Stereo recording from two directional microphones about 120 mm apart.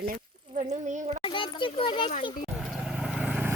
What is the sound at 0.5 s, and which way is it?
Speech, 80° right.